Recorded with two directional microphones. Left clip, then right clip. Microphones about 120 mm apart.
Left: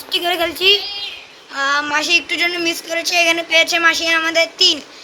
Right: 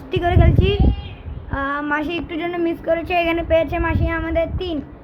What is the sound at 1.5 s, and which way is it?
Speech, 20° left (ahead or behind).